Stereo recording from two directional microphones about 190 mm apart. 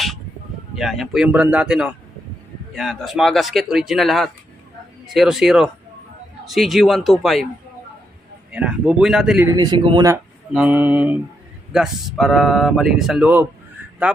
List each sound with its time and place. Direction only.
0.8 s speech: centre (ahead or behind)
8.5 s speech: 5° right (ahead or behind)
9.5 s speech: 20° right (ahead or behind)
10.5 s mantra: 10° right (ahead or behind)
11.7 s speech: centre (ahead or behind)
14.0 s mantra: 5° right (ahead or behind)